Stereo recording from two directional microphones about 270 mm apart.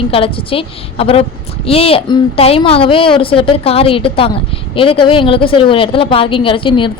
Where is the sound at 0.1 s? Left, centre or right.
Centre.